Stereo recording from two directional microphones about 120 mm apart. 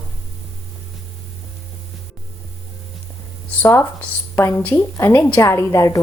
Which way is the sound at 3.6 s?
20° left (ahead or behind).